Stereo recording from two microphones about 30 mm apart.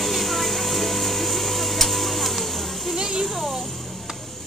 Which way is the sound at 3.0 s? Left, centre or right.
Right.